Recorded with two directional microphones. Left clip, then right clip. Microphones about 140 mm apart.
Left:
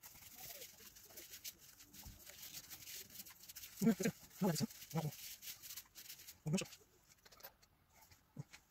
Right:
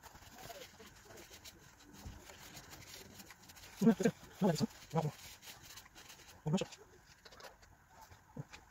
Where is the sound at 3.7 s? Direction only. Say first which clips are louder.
Right 6 dB; 25° left (ahead or behind).